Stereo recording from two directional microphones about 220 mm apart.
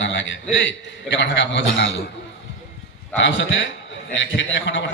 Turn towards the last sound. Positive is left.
turn(degrees=55)  # may be behind; listen again after turning